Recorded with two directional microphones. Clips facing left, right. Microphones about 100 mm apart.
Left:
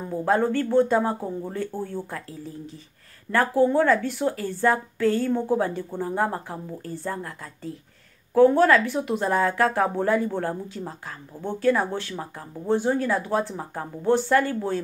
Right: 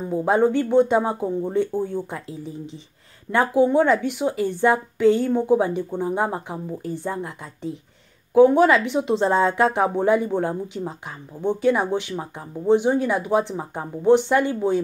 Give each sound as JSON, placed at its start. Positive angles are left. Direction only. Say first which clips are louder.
{"t": 0.1, "sound": "a woman's voice", "louder": "right 3 dB", "side_deg": -15}